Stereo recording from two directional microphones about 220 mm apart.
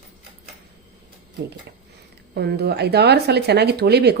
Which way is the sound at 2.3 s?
50° right (ahead or behind).